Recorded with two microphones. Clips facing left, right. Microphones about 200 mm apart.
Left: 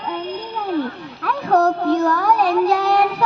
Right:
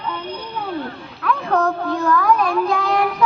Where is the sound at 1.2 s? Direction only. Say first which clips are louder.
Left 2 dB; 40° left (ahead or behind).